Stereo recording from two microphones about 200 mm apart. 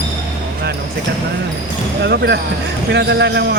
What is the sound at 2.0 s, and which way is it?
Speech, 55° right (ahead or behind).